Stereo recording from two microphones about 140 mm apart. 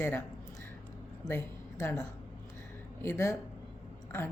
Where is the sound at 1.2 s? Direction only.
20° left (ahead or behind).